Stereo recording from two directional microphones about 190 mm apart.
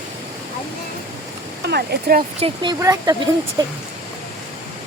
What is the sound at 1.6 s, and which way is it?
Speech, 60° right (ahead or behind).